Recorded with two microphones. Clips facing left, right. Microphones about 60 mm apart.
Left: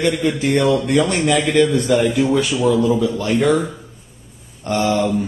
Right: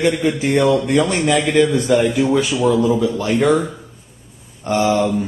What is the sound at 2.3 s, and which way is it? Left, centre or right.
Speech, centre.